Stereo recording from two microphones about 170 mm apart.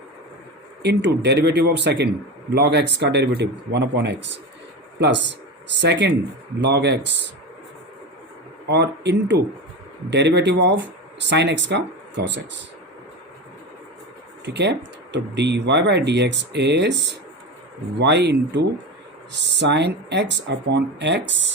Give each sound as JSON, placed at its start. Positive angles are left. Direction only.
{"t": 0.8, "sound": "a man's voice", "side_deg": -80}
{"t": 6.6, "sound": "speech", "side_deg": -80}
{"t": 8.7, "sound": "speech", "side_deg": -85}
{"t": 14.4, "sound": "speech", "side_deg": -90}